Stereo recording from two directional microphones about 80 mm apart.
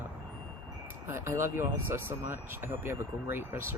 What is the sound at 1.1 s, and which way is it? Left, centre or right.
Speech, right.